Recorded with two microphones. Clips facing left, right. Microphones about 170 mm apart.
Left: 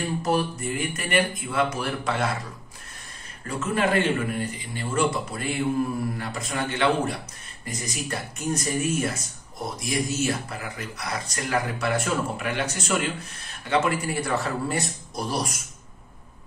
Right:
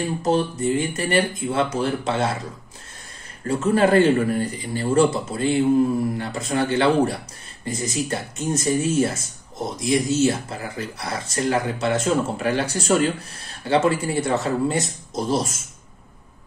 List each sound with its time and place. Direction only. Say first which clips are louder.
0.2 s speech: right 5 dB; 20° right (ahead or behind)
3.4 s speech: right 7 dB; 30° right (ahead or behind)
12.4 s speech: right 6 dB; 35° right (ahead or behind)